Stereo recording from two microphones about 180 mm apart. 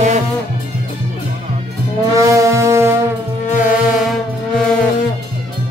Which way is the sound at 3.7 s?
5° right (ahead or behind).